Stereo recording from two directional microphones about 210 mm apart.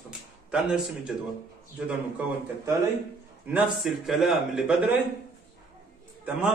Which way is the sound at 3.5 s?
Centre (ahead or behind).